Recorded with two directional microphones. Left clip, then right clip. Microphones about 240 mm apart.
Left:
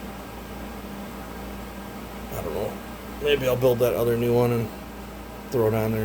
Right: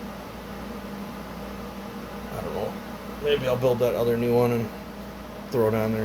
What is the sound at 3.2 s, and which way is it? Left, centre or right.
Speech, left.